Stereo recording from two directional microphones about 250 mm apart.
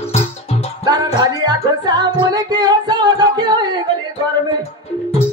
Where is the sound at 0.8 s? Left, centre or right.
Centre.